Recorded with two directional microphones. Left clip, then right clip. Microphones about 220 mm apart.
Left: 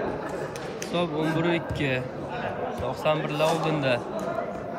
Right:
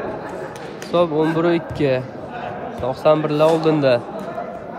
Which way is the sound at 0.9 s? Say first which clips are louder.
Right 10 dB; 20° right (ahead or behind).